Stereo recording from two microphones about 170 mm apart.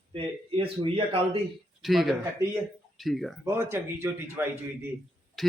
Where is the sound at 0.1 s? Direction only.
30° right (ahead or behind).